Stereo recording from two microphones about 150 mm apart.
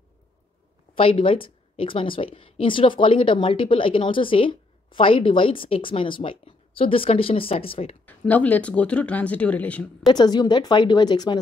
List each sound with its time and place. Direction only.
0.9 s speech: 35° left (ahead or behind)
8.0 s speech: 10° left (ahead or behind)
10.0 s speech: 30° left (ahead or behind)